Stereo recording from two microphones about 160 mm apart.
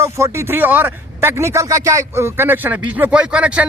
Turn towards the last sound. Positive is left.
turn(degrees=-5)  # may be behind; listen again after turning